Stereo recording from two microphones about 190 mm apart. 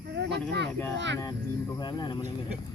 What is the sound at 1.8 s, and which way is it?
Speech, 20° left (ahead or behind).